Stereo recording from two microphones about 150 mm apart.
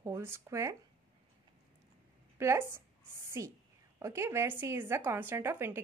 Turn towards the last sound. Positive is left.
turn(degrees=-15)  # may be behind; listen again after turning